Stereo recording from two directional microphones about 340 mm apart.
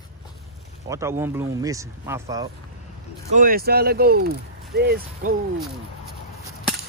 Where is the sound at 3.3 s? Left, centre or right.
Right.